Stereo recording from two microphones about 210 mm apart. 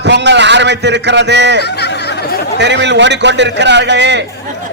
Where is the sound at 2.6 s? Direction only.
55° right (ahead or behind).